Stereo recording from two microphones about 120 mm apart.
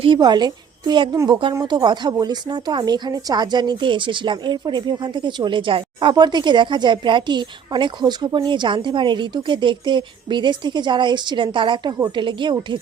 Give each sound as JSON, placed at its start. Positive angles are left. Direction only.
{"t": 0.0, "sound": "speech", "side_deg": -40}